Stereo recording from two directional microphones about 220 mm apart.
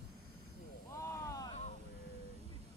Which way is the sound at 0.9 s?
15° left (ahead or behind).